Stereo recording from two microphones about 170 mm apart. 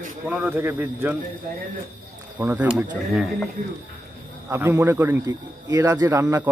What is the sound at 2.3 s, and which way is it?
Speech, 10° right (ahead or behind).